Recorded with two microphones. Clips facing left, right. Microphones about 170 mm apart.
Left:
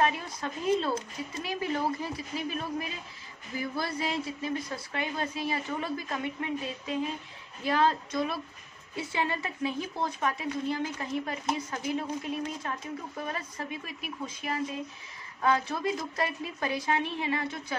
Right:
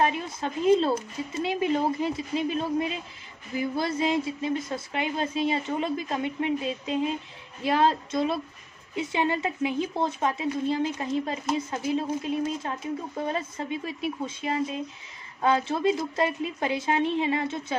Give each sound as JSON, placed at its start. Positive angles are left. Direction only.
{"t": 0.0, "sound": "speech", "side_deg": -25}